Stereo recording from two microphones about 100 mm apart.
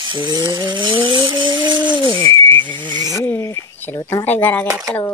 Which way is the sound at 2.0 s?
55° right (ahead or behind).